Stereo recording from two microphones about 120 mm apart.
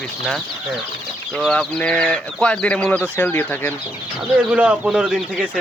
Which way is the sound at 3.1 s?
20° left (ahead or behind).